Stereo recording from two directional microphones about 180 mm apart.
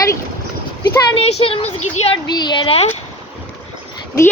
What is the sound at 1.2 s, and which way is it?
Speech, 35° left (ahead or behind).